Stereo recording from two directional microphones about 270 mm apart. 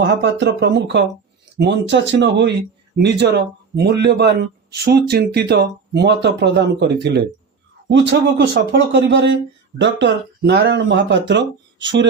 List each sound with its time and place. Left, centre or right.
0.0 s a man's voice: right